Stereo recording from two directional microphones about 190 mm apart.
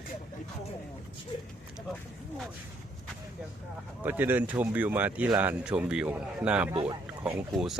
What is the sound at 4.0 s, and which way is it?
A man's voice, 10° right (ahead or behind).